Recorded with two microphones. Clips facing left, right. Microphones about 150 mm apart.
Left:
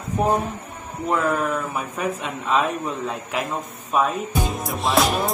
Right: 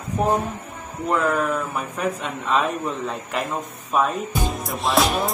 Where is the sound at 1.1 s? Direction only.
Centre (ahead or behind).